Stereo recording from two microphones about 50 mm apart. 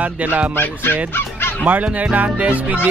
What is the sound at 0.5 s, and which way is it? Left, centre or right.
Speech, left.